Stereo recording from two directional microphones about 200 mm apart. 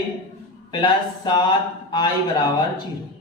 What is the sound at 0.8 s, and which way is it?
Speech, 20° left (ahead or behind).